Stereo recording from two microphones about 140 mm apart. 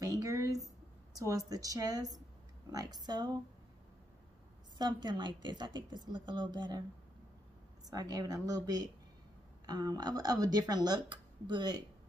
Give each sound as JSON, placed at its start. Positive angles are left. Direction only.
{"t": 0.0, "sound": "a sound", "side_deg": -25}
{"t": 1.1, "sound": "speech", "side_deg": -25}
{"t": 4.7, "sound": "a woman's voice", "side_deg": -30}
{"t": 7.9, "sound": "speech", "side_deg": -25}